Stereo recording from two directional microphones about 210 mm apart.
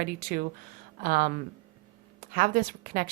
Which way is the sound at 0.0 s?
45° right (ahead or behind).